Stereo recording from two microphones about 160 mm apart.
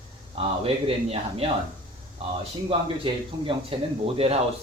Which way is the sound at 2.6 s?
35° right (ahead or behind).